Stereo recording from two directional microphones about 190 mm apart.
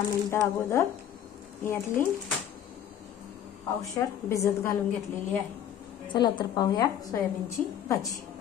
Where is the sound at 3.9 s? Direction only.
15° left (ahead or behind).